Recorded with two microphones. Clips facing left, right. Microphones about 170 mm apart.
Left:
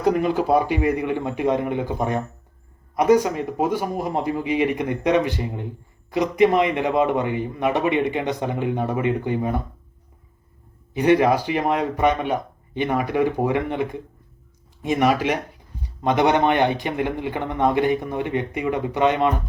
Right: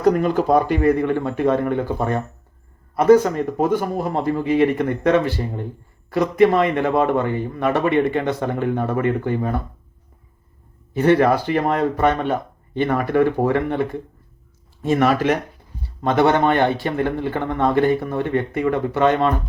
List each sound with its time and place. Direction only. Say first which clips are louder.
0.0 s a man's voice: right 3 dB; 10° left (ahead or behind)
10.9 s a man's voice: right 1 dB; 15° left (ahead or behind)